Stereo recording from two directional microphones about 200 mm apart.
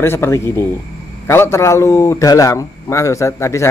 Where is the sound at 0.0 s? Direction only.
10° left (ahead or behind).